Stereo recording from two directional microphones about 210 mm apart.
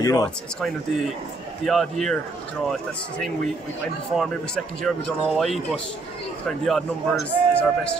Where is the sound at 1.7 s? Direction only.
Centre (ahead or behind).